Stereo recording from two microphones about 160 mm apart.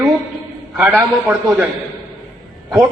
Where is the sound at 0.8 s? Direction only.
10° right (ahead or behind).